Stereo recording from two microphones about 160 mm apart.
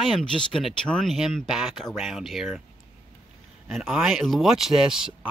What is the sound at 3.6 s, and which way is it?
Speech, centre (ahead or behind).